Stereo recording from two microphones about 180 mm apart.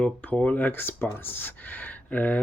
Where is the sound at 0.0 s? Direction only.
10° left (ahead or behind).